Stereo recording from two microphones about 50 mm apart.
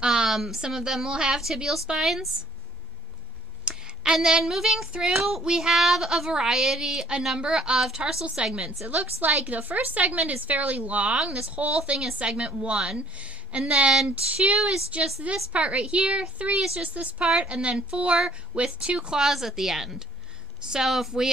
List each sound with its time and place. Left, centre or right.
0.0 s speech: centre
3.6 s speech: centre
5.1 s child singing: centre
5.4 s speech: centre
8.8 s a woman's voice: right; by 21.1 s centre